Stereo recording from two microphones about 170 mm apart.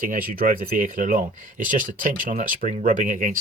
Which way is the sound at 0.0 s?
55° right (ahead or behind).